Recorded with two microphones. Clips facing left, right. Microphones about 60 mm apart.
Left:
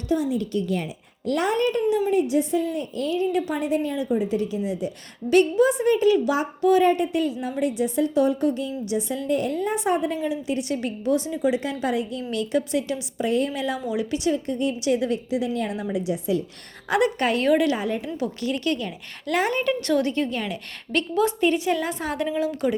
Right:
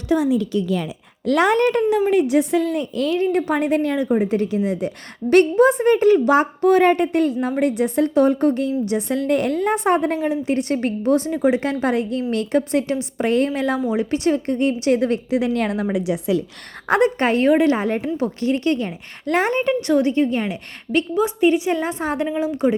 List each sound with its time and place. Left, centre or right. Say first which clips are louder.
0.1 s a woman's voice: right 5 dB; right
1.3 s a woman's voice: right 6 dB; right
3.3 s a woman's voice: right 5 dB; right
13.5 s a woman's voice: right 6 dB; right
16.9 s a woman's voice: right 4 dB; right